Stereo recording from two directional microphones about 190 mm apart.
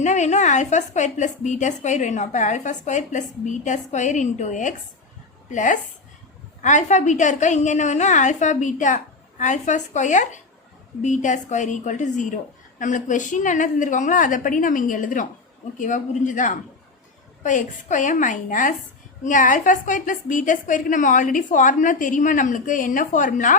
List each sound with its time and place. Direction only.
0.0 s a woman's voice: 40° left (ahead or behind)